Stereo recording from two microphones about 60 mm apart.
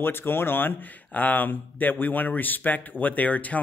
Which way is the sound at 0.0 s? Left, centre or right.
Left.